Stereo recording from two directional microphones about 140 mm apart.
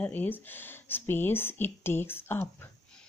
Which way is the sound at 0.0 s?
15° left (ahead or behind).